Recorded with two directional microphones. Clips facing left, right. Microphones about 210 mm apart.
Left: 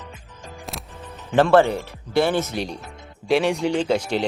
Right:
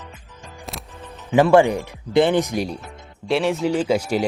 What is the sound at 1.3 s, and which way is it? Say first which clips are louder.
Speech: right 2 dB; 10° right (ahead or behind).